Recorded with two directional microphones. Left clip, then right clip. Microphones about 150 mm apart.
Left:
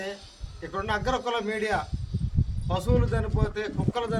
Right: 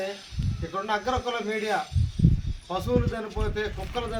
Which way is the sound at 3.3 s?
30° left (ahead or behind).